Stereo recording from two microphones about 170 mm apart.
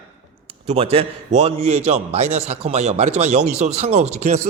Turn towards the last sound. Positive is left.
turn(degrees=-40)  # may be behind; listen again after turning